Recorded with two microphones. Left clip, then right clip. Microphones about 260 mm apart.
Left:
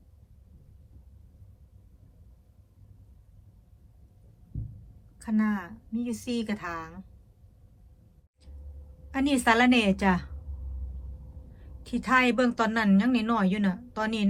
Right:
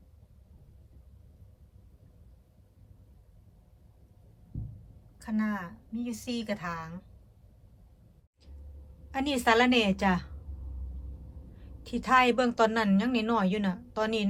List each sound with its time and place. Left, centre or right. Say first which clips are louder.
5.2 s a woman's voice: left 3 dB; centre
9.1 s a woman's voice: left 1 dB; centre
11.8 s a woman's voice: even; centre